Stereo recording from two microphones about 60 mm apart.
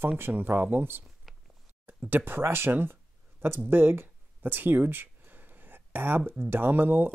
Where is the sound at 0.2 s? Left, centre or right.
Right.